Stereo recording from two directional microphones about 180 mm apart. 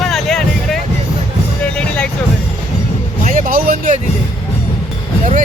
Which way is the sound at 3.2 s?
45° right (ahead or behind).